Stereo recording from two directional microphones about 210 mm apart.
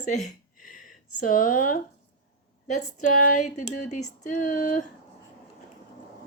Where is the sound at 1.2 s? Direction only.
40° left (ahead or behind).